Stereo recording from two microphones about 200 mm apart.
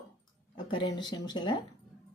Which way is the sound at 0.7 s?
25° left (ahead or behind).